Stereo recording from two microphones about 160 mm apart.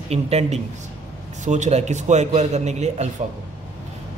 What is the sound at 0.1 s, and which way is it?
A man's voice, 40° right (ahead or behind).